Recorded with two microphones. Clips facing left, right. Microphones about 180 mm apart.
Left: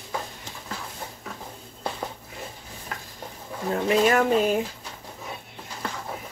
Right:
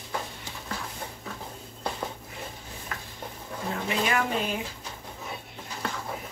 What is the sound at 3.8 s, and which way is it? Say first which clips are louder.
Speech: left 8 dB; 45° left (ahead or behind).